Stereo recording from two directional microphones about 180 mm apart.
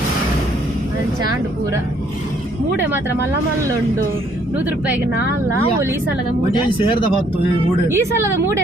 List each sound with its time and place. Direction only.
6.7 s speech: 30° left (ahead or behind)
7.9 s speech: 15° right (ahead or behind)